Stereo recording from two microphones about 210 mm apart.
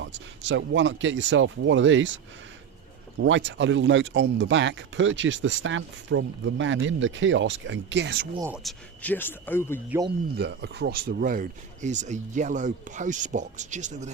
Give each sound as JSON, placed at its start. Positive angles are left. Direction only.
{"t": 0.0, "sound": "speech", "side_deg": -60}
{"t": 3.2, "sound": "speech", "side_deg": -60}
{"t": 8.4, "sound": "speech", "side_deg": -10}
{"t": 8.6, "sound": "speech", "side_deg": 5}
{"t": 10.3, "sound": "speech", "side_deg": -55}